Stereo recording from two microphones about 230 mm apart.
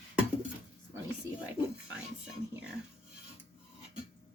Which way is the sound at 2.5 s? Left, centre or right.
Centre.